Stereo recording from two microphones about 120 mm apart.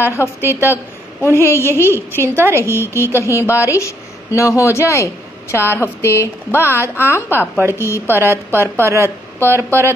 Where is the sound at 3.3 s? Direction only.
25° left (ahead or behind).